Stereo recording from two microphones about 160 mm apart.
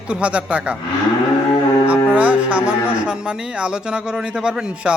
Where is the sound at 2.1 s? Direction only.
10° right (ahead or behind).